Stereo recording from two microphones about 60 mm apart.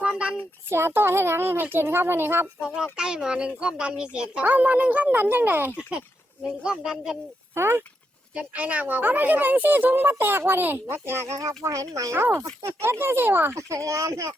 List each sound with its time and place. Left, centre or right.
0.0 s a sound: centre
0.7 s speech: right
2.6 s speech: centre; by 5.8 s right
6.4 s speech: centre
7.5 s speech: right
8.4 s speech: right
12.1 s speech: right
13.6 s speech: right